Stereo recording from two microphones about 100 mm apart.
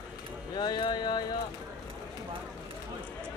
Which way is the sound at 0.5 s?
45° left (ahead or behind).